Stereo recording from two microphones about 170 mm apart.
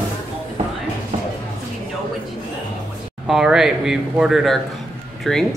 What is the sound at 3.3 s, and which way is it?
Speech, 5° right (ahead or behind).